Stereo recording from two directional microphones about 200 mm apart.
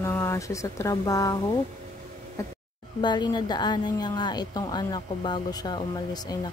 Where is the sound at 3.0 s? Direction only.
20° left (ahead or behind).